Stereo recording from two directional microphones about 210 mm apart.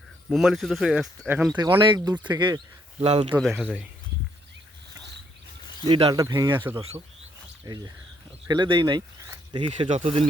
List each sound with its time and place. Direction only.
0.3 s speech: centre (ahead or behind)
1.5 s speech: 20° right (ahead or behind)
3.4 s speech: centre (ahead or behind)
5.9 s speech: 20° right (ahead or behind)